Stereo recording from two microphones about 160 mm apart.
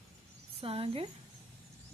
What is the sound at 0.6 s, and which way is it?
Speech, 35° right (ahead or behind).